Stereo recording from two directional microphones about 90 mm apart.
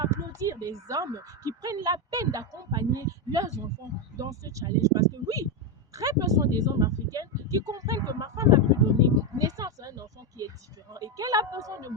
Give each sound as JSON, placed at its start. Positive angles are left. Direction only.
{"t": 0.1, "sound": "speech", "side_deg": -35}